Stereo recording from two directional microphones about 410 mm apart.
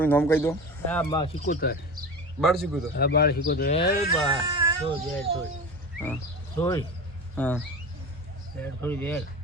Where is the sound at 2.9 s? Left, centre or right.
Left.